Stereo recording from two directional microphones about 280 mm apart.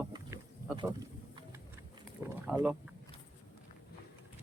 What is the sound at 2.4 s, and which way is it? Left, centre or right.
Speech, centre.